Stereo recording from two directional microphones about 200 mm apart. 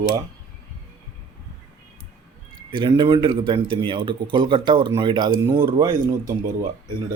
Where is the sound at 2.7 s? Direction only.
20° right (ahead or behind).